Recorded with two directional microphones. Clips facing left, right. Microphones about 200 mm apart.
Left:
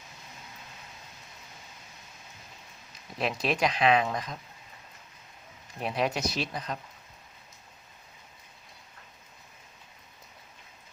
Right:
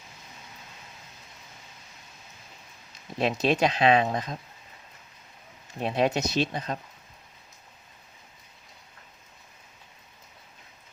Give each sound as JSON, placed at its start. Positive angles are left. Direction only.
{"t": 3.2, "sound": "speech", "side_deg": -25}
{"t": 5.8, "sound": "speech", "side_deg": -25}